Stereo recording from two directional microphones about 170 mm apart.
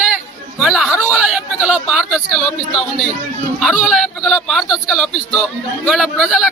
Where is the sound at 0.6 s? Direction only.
Centre (ahead or behind).